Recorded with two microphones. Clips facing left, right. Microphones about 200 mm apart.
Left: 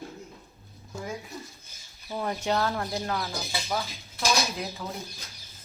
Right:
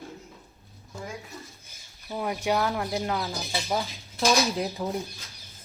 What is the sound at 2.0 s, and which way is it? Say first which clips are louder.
Speech: right 1 dB; 10° right (ahead or behind).